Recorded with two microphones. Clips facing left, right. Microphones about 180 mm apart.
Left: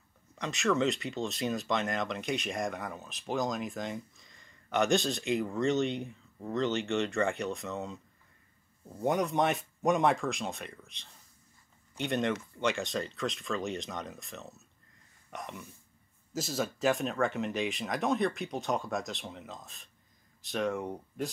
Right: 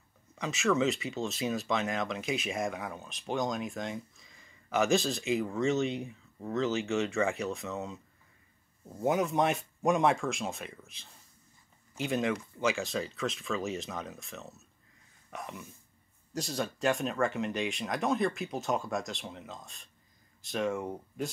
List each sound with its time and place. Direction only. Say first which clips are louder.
0.4 s speech: right 1 dB; centre (ahead or behind)